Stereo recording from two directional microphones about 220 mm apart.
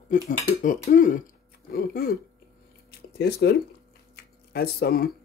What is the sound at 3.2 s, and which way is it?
Speech, 45° left (ahead or behind).